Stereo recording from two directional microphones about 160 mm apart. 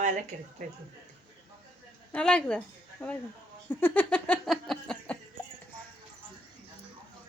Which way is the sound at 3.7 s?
10° left (ahead or behind).